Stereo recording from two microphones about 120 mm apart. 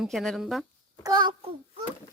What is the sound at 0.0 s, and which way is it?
Speech, centre (ahead or behind).